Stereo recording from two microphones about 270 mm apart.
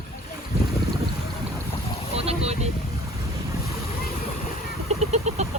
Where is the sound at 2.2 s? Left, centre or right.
Right.